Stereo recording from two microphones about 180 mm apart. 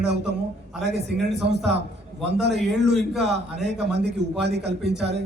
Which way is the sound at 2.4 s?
70° right (ahead or behind).